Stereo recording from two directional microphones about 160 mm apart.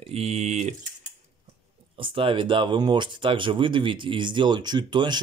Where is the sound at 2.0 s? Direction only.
35° right (ahead or behind).